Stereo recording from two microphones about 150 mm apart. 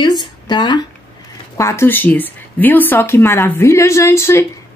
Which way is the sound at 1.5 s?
20° left (ahead or behind).